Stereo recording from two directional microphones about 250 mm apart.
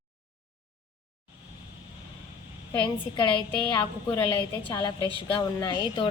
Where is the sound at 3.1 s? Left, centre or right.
Centre.